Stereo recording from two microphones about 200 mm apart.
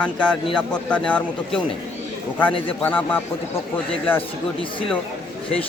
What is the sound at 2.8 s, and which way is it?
Speech, 10° left (ahead or behind).